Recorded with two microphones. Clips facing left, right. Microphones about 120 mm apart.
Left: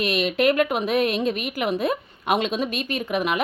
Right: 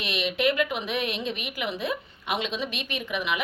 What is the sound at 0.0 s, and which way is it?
A woman's voice, 45° left (ahead or behind).